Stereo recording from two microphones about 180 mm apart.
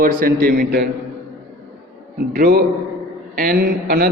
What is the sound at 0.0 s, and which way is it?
Speech, 50° right (ahead or behind).